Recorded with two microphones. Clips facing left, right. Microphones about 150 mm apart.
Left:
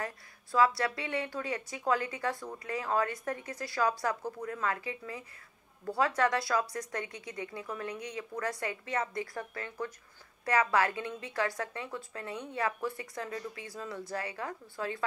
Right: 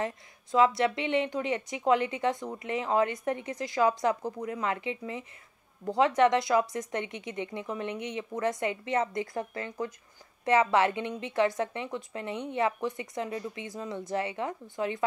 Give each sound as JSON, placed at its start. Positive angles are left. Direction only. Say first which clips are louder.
{"t": 0.0, "sound": "speech", "louder": "right 6 dB", "side_deg": -20}